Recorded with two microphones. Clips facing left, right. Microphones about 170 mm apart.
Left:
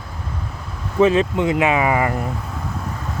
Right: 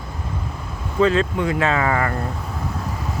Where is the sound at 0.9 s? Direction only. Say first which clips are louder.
Left 3 dB; 20° left (ahead or behind).